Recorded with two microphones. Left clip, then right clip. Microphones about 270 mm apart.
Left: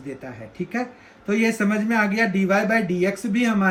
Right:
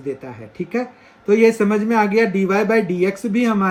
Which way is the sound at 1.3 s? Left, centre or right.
Centre.